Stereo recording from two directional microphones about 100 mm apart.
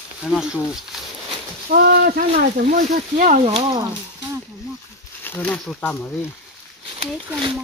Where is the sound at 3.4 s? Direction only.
80° right.